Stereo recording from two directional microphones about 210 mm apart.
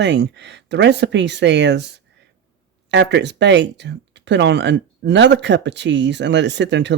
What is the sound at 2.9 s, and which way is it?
Speech, 55° right (ahead or behind).